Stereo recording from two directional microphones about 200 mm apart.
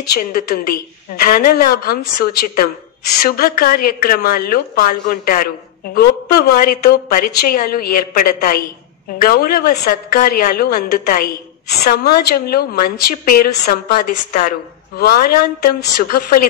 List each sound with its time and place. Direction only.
0.1 s speech: 45° left (ahead or behind)